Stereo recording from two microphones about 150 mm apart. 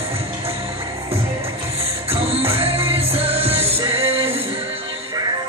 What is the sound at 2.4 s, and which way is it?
Music, 40° right (ahead or behind).